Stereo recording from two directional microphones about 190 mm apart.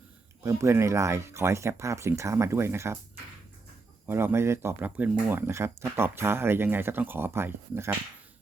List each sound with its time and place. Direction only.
0.4 s speech: 15° right (ahead or behind)
4.0 s speech: 10° right (ahead or behind)